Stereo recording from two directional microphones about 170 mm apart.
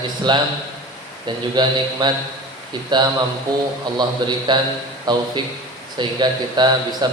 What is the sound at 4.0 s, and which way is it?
A man's voice, 25° right (ahead or behind).